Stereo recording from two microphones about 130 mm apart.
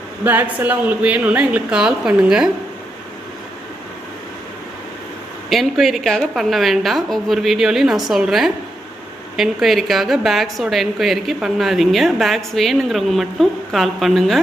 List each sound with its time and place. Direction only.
0.3 s a woman's voice: 15° right (ahead or behind)
5.5 s a woman's voice: centre (ahead or behind)